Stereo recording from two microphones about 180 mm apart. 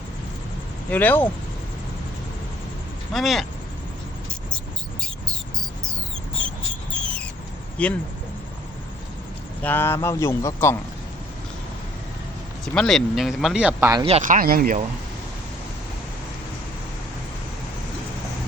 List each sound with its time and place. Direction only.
0.9 s speech: 10° left (ahead or behind)
3.1 s speech: centre (ahead or behind)
4.5 s a sound: 5° left (ahead or behind)
6.9 s a sound: 5° left (ahead or behind)
7.8 s speech: 5° left (ahead or behind)
9.6 s speech: 10° left (ahead or behind)
12.6 s speech: 5° left (ahead or behind); by 14.0 s 15° right (ahead or behind)
14.0 s speech: 40° right (ahead or behind); by 14.8 s 55° right (ahead or behind)